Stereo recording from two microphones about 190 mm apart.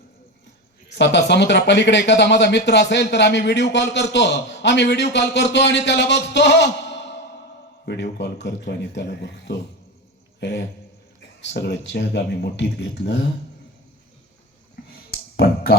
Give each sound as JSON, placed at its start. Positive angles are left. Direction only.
{"t": 0.9, "sound": "a man's voice", "side_deg": 65}
{"t": 8.2, "sound": "a man's voice", "side_deg": 70}
{"t": 11.3, "sound": "speech", "side_deg": 65}